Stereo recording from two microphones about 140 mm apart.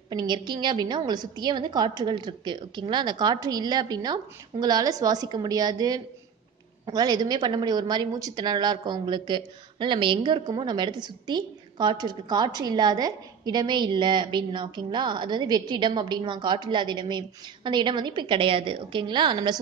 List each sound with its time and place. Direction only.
0.1 s a woman's voice: 30° right (ahead or behind)